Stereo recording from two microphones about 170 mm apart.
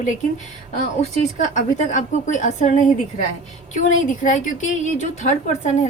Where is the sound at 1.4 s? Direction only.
45° left (ahead or behind).